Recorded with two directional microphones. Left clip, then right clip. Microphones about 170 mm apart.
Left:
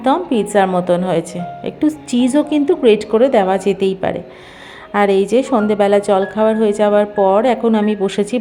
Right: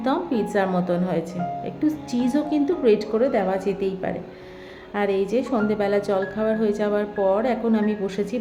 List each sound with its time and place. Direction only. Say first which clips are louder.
0.0 s a woman's voice: left 8 dB; 25° left (ahead or behind)